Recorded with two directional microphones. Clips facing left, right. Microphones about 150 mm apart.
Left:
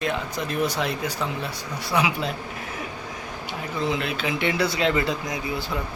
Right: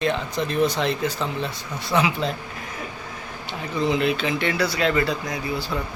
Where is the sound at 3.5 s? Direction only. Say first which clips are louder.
Right 3 dB; centre (ahead or behind); by 5.6 s 20° left (ahead or behind).